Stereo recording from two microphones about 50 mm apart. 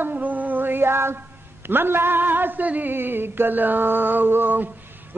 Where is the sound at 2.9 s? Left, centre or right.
Right.